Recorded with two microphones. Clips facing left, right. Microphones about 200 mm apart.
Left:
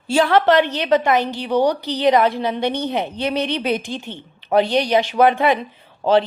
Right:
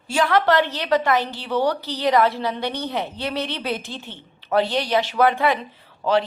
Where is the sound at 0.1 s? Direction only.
30° left (ahead or behind).